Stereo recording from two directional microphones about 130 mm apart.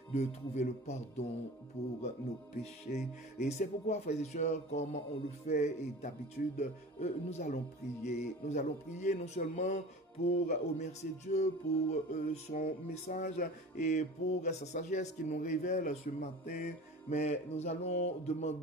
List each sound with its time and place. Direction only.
0.1 s music: 60° left (ahead or behind)
2.9 s music: 70° left (ahead or behind)
3.3 s music: 60° left (ahead or behind)